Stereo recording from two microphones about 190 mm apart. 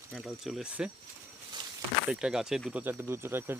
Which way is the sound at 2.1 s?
5° right (ahead or behind).